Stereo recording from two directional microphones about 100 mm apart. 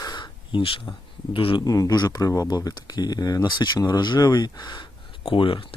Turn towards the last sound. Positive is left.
turn(degrees=60)  # may be behind; listen again after turning